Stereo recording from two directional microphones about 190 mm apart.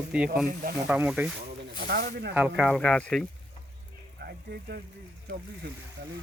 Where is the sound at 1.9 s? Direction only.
55° right (ahead or behind).